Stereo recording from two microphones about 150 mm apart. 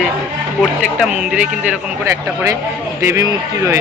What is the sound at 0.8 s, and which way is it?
Speech, 5° right (ahead or behind).